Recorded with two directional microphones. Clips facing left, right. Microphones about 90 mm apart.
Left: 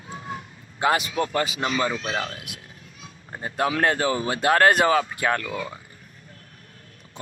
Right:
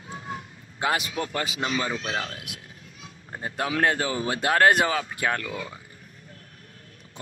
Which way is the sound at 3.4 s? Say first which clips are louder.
Left 2 dB; 40° left (ahead or behind).